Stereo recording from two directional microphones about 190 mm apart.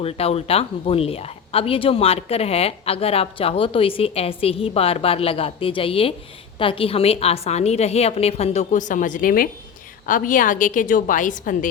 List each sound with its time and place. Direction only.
0.0 s a woman's voice: 30° left (ahead or behind)